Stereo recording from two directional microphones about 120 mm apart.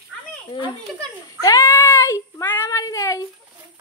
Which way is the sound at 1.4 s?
30° left (ahead or behind).